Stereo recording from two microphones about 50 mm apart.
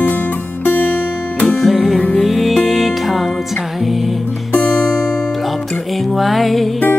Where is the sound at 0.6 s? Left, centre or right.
Left.